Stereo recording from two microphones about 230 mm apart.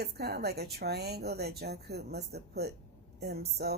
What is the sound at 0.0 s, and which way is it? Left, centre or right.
Speech, right.